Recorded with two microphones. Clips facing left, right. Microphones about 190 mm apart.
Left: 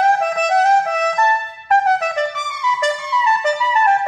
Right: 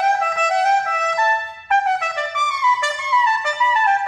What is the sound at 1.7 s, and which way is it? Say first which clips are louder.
Music: left 4 dB; 40° left (ahead or behind).